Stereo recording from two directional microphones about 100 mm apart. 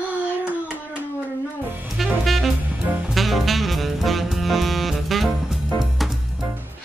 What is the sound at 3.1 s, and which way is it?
Saxophone, centre (ahead or behind).